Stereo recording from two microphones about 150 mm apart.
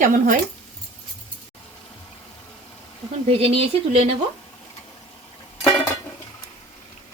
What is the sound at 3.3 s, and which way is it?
Speech, 40° right (ahead or behind).